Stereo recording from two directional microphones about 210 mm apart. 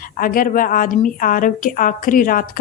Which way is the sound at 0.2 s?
40° left (ahead or behind).